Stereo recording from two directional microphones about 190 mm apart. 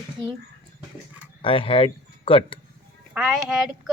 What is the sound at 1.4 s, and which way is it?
Speech, 30° left (ahead or behind).